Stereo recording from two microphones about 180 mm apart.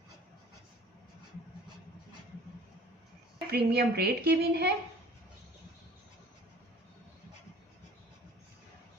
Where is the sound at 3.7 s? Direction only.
60° right (ahead or behind).